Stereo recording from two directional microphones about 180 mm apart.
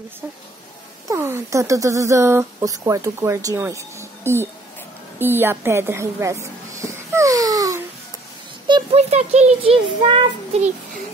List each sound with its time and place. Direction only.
1.0 s speech: 15° right (ahead or behind)
5.2 s a sound: 10° right (ahead or behind)
8.6 s a child's voice: 30° right (ahead or behind)